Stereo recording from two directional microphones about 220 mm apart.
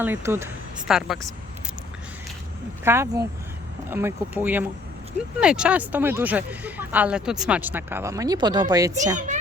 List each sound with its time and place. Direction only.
0.0 s speech: 10° right (ahead or behind)
2.8 s speech: 10° right (ahead or behind)
9.1 s a child's voice: 35° right (ahead or behind)